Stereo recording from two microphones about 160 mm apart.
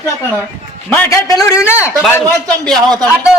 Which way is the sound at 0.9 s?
15° left (ahead or behind).